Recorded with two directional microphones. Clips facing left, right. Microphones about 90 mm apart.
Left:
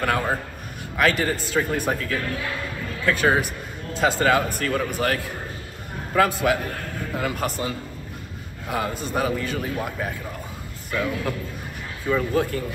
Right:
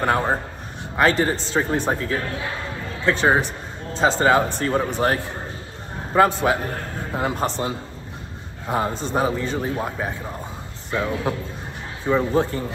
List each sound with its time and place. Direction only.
0.0 s a man's voice: 25° right (ahead or behind)
8.6 s a man's voice: 35° right (ahead or behind)